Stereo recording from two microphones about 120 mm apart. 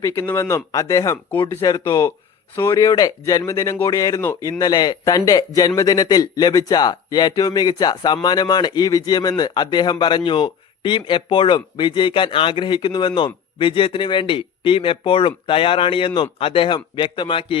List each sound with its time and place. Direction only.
0.0 s speech: 20° left (ahead or behind); by 17.6 s 45° left (ahead or behind)